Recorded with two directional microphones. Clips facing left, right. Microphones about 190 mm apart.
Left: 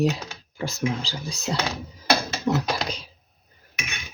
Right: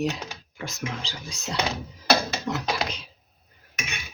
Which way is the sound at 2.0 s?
5° right (ahead or behind).